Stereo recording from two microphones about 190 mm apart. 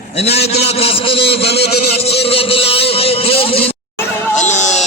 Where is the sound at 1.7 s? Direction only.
30° left (ahead or behind).